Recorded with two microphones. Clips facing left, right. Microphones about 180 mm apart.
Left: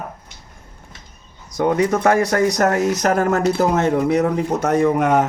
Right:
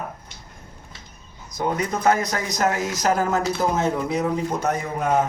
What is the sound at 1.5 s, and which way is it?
A man's voice, 70° left (ahead or behind).